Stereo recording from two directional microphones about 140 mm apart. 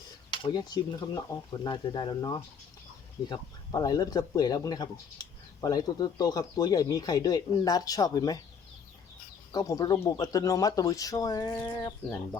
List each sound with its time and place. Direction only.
0.3 s speech: 35° left (ahead or behind)
9.5 s speech: 25° left (ahead or behind)